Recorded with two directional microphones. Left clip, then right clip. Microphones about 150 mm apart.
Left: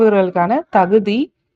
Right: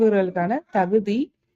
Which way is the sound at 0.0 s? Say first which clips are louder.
Left 7 dB; 10° left (ahead or behind).